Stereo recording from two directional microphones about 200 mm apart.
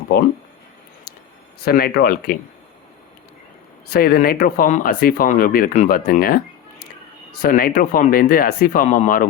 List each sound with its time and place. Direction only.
1.6 s speech: 50° left (ahead or behind)
3.9 s speech: 50° left (ahead or behind)